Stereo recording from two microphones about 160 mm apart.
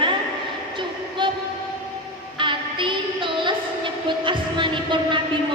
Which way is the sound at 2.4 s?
30° right (ahead or behind).